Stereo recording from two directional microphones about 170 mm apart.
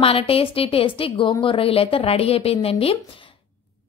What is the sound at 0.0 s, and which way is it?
A woman's voice, 35° left (ahead or behind).